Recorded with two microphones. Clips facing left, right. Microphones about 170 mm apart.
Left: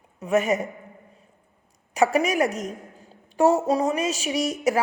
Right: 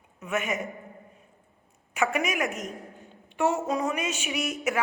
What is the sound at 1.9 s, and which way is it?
A woman's voice, 35° left (ahead or behind).